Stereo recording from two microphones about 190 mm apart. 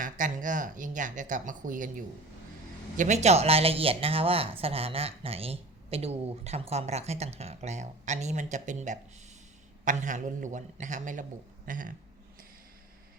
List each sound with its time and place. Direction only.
0.0 s speech: 45° right (ahead or behind)